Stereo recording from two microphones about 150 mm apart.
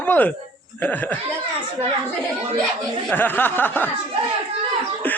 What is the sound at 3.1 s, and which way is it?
Speech, 10° left (ahead or behind).